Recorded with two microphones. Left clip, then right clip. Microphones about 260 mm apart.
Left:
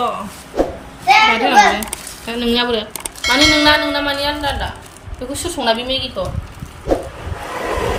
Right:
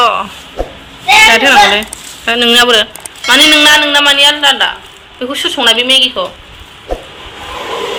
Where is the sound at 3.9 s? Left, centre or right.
Centre.